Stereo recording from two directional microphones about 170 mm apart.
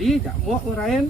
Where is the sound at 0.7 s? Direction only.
Centre (ahead or behind).